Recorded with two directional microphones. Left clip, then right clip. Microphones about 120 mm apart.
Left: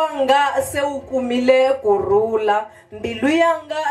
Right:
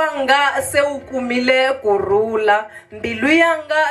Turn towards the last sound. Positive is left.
turn(degrees=-35)  # may be behind; listen again after turning